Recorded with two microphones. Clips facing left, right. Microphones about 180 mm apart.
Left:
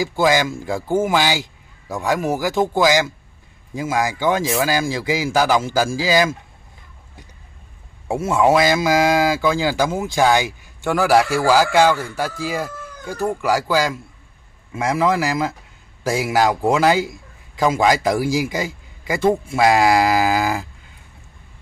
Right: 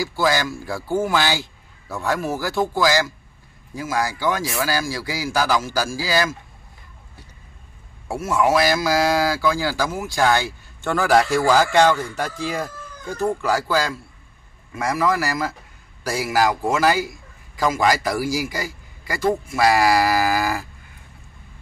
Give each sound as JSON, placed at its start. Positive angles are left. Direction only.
{"t": 0.0, "sound": "a man's voice", "side_deg": 20}
{"t": 8.1, "sound": "a man's voice", "side_deg": 25}